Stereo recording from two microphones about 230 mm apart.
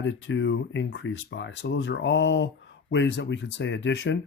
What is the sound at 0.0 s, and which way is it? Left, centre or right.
Speech, left.